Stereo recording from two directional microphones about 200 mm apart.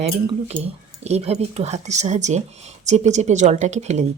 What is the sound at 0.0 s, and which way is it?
Speech, 30° right (ahead or behind).